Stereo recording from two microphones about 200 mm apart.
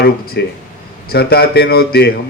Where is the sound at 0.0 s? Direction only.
55° left (ahead or behind).